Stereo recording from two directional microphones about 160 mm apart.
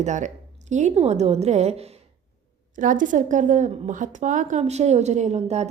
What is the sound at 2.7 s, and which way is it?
A woman's voice, 55° right (ahead or behind).